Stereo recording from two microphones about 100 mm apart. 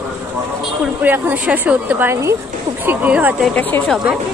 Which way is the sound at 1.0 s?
15° right (ahead or behind).